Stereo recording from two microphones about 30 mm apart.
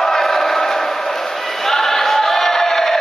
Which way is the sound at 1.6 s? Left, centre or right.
Centre.